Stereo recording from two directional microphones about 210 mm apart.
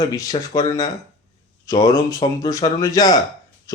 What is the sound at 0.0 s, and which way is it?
A man's voice, 15° left (ahead or behind).